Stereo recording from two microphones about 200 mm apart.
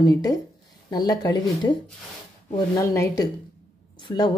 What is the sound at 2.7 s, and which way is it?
Speech, 15° left (ahead or behind).